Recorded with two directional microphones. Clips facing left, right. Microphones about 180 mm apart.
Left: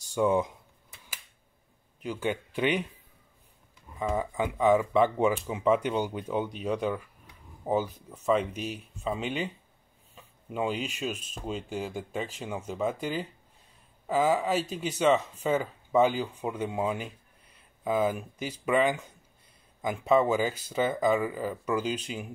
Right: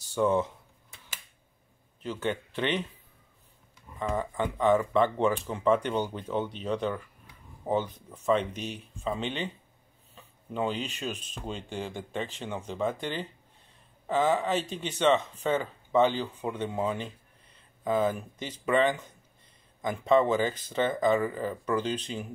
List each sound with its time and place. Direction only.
0.1 s speech: 10° left (ahead or behind)
2.0 s speech: 10° left (ahead or behind)
4.0 s speech: 10° left (ahead or behind)